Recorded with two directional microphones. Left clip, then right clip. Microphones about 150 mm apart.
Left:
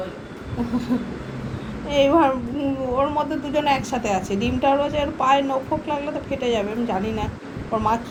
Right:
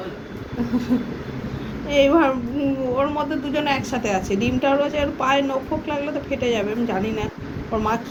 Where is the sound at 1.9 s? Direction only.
10° left (ahead or behind).